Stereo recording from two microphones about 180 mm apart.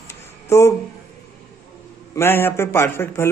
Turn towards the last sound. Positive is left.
turn(degrees=15)  # may be behind; listen again after turning